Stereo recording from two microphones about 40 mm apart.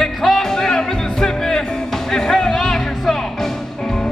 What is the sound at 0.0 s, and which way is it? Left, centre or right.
Music, centre.